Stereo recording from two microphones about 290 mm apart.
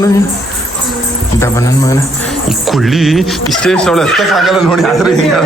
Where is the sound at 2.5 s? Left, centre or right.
Centre.